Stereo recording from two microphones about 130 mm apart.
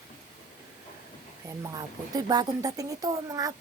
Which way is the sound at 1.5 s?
30° right (ahead or behind).